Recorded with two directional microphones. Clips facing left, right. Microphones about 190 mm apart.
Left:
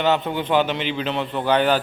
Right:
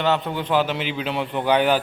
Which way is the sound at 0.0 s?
Centre (ahead or behind).